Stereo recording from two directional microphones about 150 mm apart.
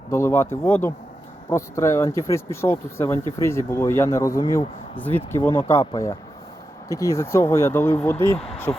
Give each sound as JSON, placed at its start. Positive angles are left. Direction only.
{"t": 0.1, "sound": "speech", "side_deg": 15}
{"t": 5.8, "sound": "speech", "side_deg": 30}